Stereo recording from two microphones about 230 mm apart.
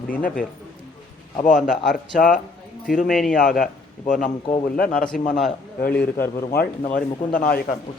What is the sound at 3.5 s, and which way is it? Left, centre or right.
Speech, left.